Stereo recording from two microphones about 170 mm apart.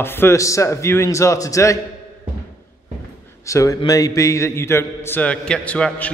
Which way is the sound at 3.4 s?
20° left (ahead or behind).